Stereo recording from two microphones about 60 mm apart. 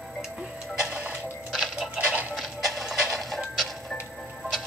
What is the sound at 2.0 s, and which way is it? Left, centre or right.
Music, right.